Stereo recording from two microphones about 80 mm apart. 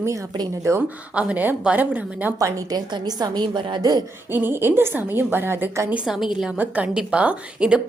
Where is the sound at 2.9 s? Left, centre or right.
Right.